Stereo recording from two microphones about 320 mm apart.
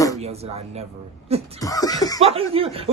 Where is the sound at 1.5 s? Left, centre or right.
Centre.